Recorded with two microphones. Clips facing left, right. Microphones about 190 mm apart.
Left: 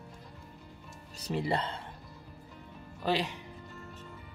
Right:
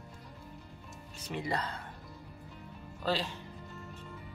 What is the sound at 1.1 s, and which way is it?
Speech, 35° left (ahead or behind).